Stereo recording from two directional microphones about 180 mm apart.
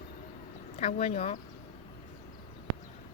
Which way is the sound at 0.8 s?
35° left (ahead or behind).